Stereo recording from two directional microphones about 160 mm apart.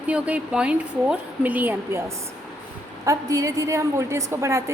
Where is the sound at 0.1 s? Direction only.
10° right (ahead or behind).